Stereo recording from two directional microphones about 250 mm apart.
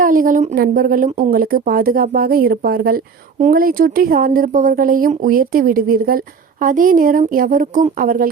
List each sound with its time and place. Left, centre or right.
0.0 s speech: right